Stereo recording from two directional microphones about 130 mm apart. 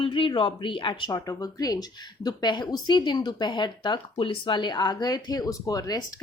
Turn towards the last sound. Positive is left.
turn(degrees=30)  # may be behind; listen again after turning